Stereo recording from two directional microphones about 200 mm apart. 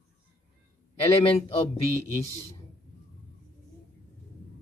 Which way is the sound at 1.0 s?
30° left (ahead or behind).